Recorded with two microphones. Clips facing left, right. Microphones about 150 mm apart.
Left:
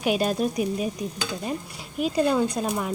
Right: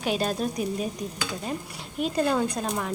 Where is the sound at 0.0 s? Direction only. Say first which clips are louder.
Left 3 dB; 10° left (ahead or behind).